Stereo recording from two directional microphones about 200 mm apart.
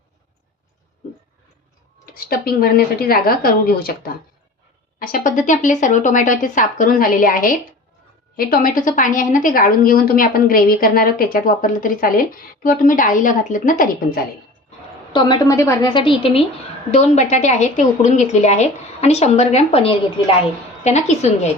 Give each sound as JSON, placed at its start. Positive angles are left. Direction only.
{"t": 2.1, "sound": "a woman's voice", "side_deg": 50}
{"t": 15.1, "sound": "a woman's voice", "side_deg": 20}